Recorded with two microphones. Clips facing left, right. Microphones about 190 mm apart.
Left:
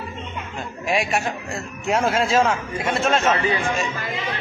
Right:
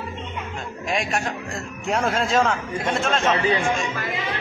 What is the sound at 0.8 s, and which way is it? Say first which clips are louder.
A man's voice: left 3 dB; 5° left (ahead or behind).